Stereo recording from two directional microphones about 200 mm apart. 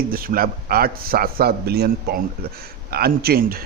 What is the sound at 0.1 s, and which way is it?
Speech, 45° right (ahead or behind).